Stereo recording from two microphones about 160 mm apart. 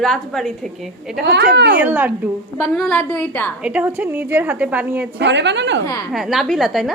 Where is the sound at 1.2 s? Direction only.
90° right.